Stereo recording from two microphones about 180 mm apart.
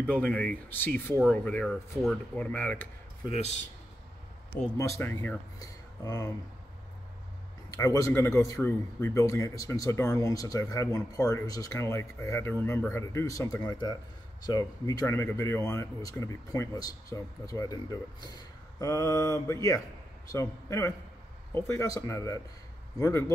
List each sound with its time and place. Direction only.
0.0 s speech: 10° left (ahead or behind)
3.3 s a man's voice: 40° left (ahead or behind)
4.7 s speech: 15° left (ahead or behind)
7.7 s speech: 20° left (ahead or behind)
18.8 s speech: 15° left (ahead or behind)